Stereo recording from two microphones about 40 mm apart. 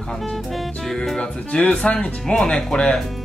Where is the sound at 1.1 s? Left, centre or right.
Left.